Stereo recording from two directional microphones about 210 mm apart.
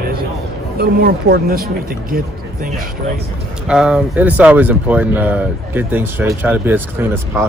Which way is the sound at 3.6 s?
Centre (ahead or behind).